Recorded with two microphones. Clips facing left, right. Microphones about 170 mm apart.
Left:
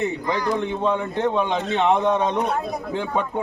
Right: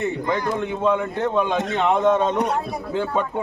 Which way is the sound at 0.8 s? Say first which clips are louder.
Right 1 dB; 20° left (ahead or behind).